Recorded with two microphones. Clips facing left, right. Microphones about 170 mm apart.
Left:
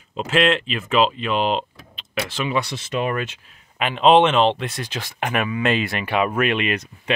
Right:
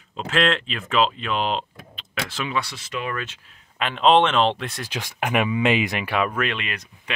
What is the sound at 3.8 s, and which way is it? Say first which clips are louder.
Speech: left 3 dB; 5° left (ahead or behind).